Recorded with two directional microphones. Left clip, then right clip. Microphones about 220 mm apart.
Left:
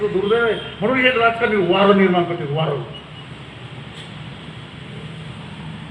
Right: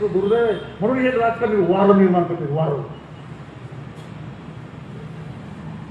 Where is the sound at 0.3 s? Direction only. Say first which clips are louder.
Left 1 dB; 25° right (ahead or behind).